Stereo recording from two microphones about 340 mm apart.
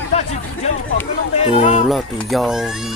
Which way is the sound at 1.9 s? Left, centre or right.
Centre.